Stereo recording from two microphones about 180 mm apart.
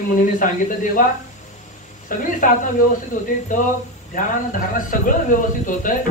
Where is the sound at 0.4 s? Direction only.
50° left (ahead or behind).